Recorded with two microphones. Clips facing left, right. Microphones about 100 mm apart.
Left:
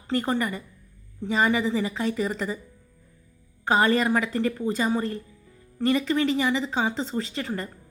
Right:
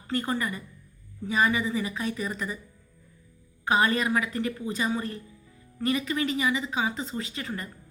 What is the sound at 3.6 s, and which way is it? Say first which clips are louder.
Speech: left 3 dB; 30° left (ahead or behind).